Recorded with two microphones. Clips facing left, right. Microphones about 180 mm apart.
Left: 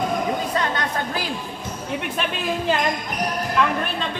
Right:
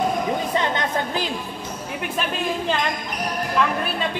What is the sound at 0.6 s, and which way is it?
Speech, 20° right (ahead or behind).